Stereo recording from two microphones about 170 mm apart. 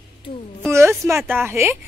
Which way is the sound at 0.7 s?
15° right (ahead or behind).